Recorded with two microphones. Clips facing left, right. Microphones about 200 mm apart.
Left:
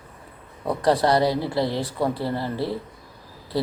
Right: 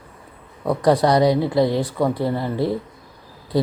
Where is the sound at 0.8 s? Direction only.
15° right (ahead or behind).